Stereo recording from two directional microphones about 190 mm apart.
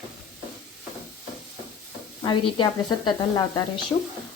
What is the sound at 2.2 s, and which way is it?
Speech, 25° left (ahead or behind).